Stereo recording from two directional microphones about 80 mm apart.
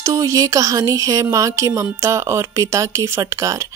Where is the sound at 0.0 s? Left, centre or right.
Right.